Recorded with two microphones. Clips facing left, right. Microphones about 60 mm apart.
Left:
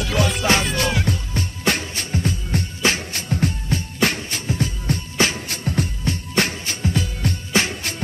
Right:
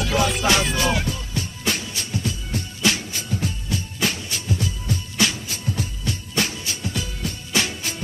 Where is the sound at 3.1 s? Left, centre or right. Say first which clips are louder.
Left 4 dB; left.